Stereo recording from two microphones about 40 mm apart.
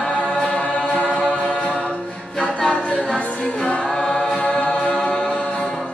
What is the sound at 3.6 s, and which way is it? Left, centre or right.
Choir, left.